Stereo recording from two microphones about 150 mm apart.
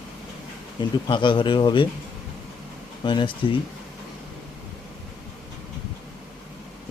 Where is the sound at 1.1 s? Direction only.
35° left (ahead or behind).